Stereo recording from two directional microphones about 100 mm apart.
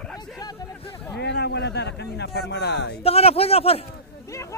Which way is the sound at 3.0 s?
80° left.